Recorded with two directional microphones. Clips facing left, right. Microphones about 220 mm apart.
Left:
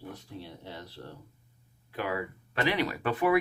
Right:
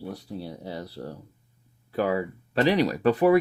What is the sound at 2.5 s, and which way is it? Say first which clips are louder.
Speech: right 7 dB; 35° right (ahead or behind).